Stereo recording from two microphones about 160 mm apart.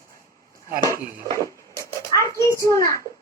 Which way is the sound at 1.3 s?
20° left (ahead or behind).